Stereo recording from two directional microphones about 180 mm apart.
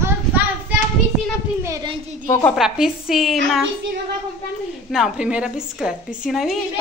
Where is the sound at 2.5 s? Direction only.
Centre (ahead or behind).